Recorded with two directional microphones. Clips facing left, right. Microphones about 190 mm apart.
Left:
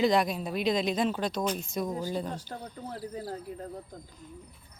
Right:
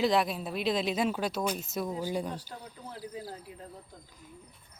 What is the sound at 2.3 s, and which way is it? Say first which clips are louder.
Speech: left 3 dB; 45° left (ahead or behind).